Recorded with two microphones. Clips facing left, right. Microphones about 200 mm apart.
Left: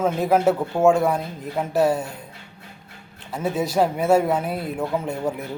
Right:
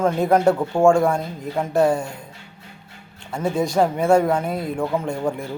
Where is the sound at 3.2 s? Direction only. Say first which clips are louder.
Right 2 dB; 5° left (ahead or behind).